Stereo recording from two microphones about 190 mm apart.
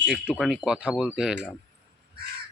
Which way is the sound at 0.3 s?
Centre (ahead or behind).